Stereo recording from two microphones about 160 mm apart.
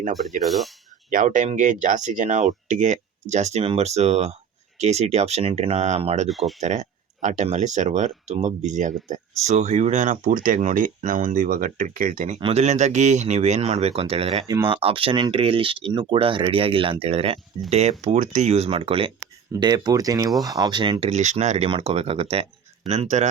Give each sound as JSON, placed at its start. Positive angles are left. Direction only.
{"t": 0.2, "sound": "speech", "side_deg": 0}
{"t": 1.1, "sound": "speech", "side_deg": -55}
{"t": 6.2, "sound": "speech", "side_deg": 0}
{"t": 6.6, "sound": "speech", "side_deg": -45}
{"t": 12.4, "sound": "speech", "side_deg": -40}
{"t": 14.4, "sound": "speech", "side_deg": -25}
{"t": 21.1, "sound": "speech", "side_deg": -45}